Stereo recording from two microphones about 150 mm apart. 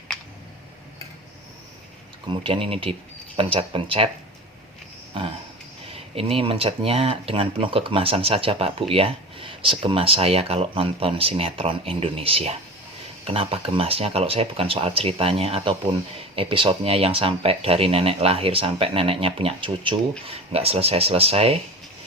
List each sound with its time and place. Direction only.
2.4 s speech: 40° right (ahead or behind)
5.2 s speech: 35° right (ahead or behind)